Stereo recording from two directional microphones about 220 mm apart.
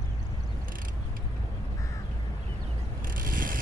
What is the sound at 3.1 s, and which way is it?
Vehicle, 40° right (ahead or behind).